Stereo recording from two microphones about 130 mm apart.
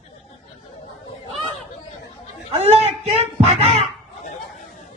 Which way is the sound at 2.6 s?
55° right (ahead or behind).